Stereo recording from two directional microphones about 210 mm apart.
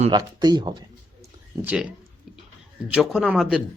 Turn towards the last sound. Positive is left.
turn(degrees=-5)  # may be behind; listen again after turning